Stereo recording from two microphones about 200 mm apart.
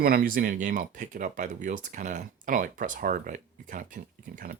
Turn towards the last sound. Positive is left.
turn(degrees=-40)  # may be behind; listen again after turning